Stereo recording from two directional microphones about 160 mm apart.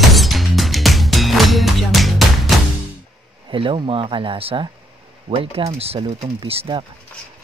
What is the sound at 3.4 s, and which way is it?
Speech, 30° right (ahead or behind).